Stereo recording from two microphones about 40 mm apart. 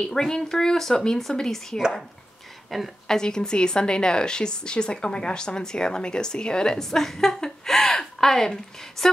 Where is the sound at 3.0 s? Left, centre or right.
Centre.